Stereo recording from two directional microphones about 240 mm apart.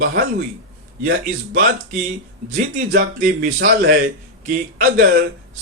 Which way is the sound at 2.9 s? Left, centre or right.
Right.